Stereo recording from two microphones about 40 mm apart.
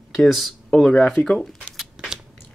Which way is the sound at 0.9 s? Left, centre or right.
Left.